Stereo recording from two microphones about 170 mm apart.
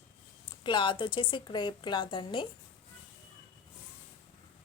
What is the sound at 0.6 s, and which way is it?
A woman's voice, 25° left (ahead or behind).